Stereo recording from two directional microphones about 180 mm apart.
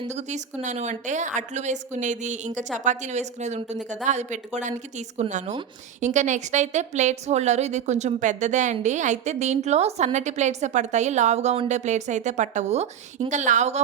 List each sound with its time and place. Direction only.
0.1 s a woman's voice: 40° right (ahead or behind)